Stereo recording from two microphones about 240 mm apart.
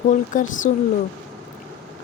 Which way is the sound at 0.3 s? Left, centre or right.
Left.